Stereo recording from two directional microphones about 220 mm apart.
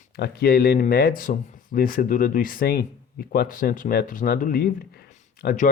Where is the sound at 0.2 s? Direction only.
45° left (ahead or behind).